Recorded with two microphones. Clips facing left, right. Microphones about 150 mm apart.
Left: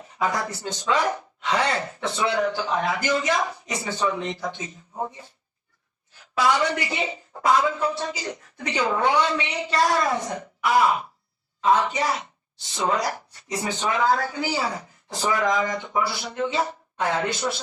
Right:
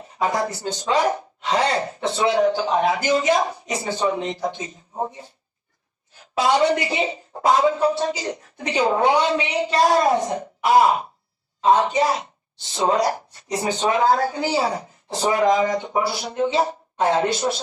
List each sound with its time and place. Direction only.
0.2 s speech: 30° right (ahead or behind)
6.3 s speech: 25° right (ahead or behind)